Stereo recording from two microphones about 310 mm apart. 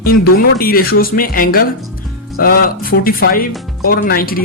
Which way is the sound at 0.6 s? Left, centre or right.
Left.